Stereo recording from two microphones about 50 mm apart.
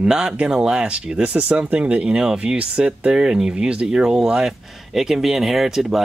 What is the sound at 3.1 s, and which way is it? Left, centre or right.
Speech, centre.